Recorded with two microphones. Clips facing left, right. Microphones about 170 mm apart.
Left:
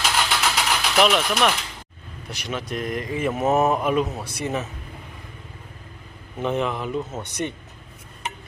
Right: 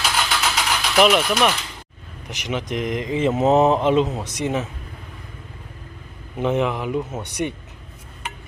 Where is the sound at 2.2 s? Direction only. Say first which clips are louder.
Right 3 dB; 15° right (ahead or behind).